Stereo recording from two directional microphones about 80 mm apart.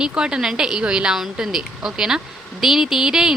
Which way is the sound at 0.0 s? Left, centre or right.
Centre.